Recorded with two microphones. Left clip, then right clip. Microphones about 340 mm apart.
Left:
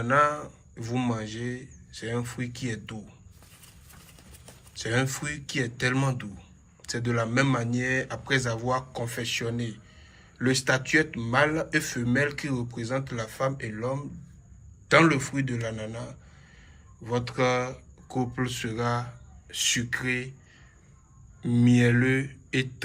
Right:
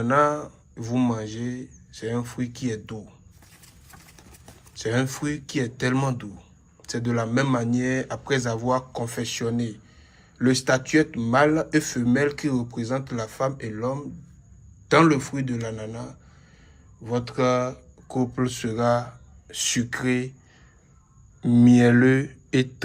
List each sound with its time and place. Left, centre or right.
0.0 s speech: centre
4.7 s speech: centre
21.4 s speech: right